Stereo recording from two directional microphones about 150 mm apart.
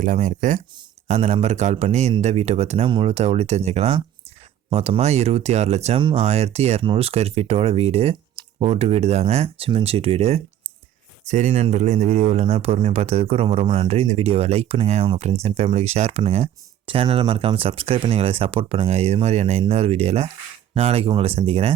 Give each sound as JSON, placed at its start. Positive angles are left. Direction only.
{"t": 0.0, "sound": "speech", "side_deg": -60}